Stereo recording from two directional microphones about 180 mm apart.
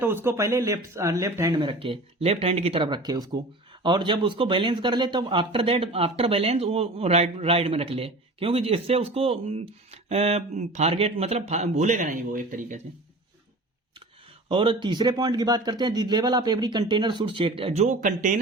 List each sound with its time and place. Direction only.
0.0 s speech: 10° right (ahead or behind); by 12.8 s 45° right (ahead or behind)
14.5 s speech: 30° right (ahead or behind); by 18.3 s 45° right (ahead or behind)